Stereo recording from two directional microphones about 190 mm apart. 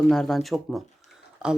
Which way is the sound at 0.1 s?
Centre (ahead or behind).